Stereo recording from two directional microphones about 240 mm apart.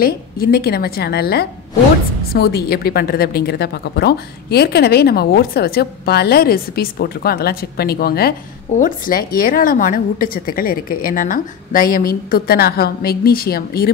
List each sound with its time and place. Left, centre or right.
0.0 s a woman's voice: left